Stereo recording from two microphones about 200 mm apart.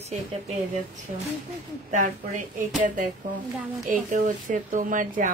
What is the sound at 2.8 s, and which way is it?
A woman's voice, 40° right (ahead or behind).